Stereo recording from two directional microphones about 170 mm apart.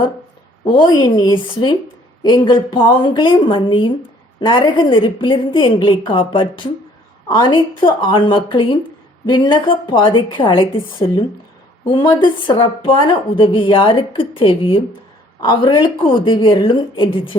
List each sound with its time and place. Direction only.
0.8 s a woman's voice: 25° left (ahead or behind)